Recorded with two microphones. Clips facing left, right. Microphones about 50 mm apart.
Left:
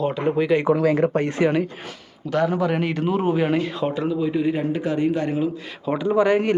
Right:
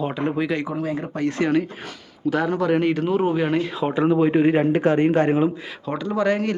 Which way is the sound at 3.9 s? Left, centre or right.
Right.